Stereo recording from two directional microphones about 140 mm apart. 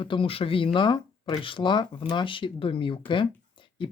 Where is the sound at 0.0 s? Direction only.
40° left (ahead or behind).